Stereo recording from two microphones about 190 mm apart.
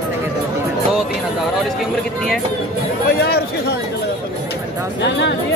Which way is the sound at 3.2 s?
55° left (ahead or behind).